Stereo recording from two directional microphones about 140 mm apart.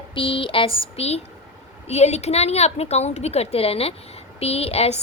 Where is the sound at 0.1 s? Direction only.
40° left (ahead or behind).